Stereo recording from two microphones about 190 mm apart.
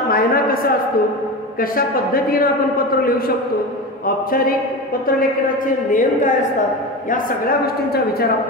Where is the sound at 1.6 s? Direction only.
50° left (ahead or behind).